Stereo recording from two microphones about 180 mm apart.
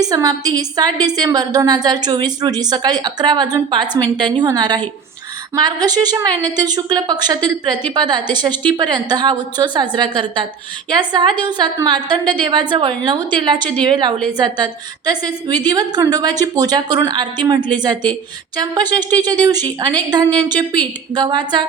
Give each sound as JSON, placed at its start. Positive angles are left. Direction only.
{"t": 0.0, "sound": "a woman's voice", "side_deg": -20}